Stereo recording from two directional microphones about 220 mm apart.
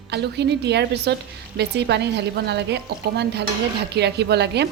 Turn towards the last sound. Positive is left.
turn(degrees=-50)  # may be behind; listen again after turning